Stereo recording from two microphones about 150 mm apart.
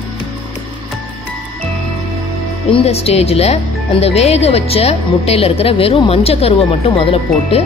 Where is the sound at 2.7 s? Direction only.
45° left (ahead or behind).